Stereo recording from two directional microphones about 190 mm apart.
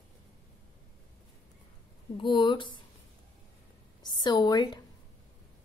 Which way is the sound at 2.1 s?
25° left (ahead or behind).